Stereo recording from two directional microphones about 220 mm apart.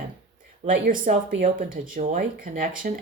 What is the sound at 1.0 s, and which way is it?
Speech, 40° right (ahead or behind).